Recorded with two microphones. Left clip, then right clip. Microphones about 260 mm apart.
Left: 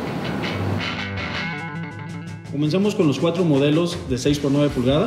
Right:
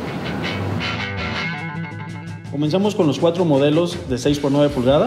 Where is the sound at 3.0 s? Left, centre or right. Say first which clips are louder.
Right 4 dB; centre.